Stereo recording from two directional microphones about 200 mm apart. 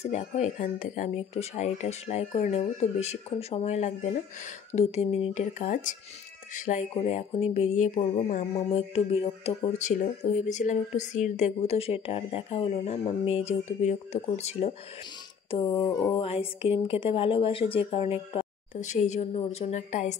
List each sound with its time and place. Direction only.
0.0 s music: 35° left (ahead or behind)
16.2 s speech: 30° left (ahead or behind)
19.6 s music: 35° left (ahead or behind)